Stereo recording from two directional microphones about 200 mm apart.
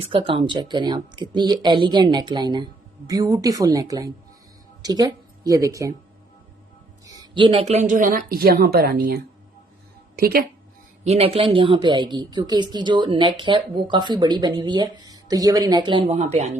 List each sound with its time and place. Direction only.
0.0 s speech: 25° right (ahead or behind)
7.0 s speech: 20° right (ahead or behind); by 10.4 s 50° right (ahead or behind)
11.0 s speech: 30° right (ahead or behind)